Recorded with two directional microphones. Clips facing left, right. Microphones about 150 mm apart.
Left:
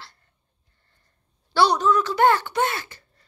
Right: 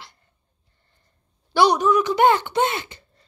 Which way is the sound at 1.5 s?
15° right (ahead or behind).